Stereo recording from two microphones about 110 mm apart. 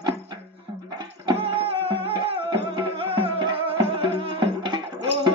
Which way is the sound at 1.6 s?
55° right (ahead or behind).